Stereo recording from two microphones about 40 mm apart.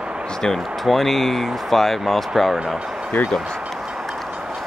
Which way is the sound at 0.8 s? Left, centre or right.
Centre.